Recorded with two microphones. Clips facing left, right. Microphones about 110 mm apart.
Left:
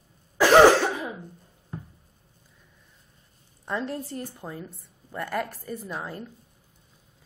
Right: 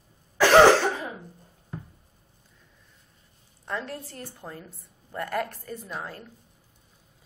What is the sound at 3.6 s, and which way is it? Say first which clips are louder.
A woman's voice: left 3 dB; 20° left (ahead or behind).